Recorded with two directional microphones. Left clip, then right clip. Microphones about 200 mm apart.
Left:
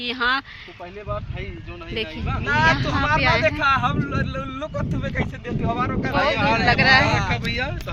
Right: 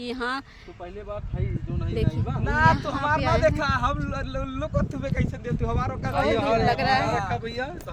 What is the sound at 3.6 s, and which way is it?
Speech, 60° right (ahead or behind).